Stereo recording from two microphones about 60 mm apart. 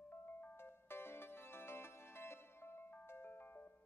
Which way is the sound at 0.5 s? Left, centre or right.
Left.